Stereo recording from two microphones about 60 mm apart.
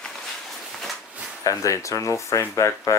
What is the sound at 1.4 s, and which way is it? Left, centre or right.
Speech, left.